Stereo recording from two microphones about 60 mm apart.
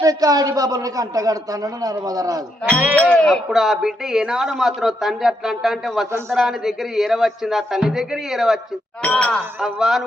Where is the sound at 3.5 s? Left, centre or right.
Centre.